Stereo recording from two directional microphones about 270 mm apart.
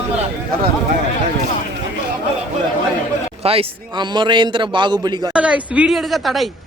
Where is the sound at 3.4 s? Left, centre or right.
Right.